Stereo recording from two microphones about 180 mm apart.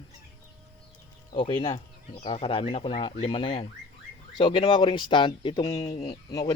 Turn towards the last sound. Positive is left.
turn(degrees=25)  # may be behind; listen again after turning